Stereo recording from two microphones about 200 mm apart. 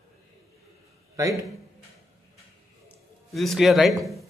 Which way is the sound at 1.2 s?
15° right (ahead or behind).